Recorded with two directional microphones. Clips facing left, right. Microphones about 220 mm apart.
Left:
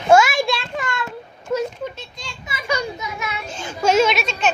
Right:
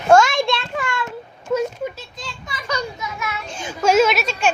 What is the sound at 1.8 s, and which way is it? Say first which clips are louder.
Children playing: right 2 dB; 5° right (ahead or behind).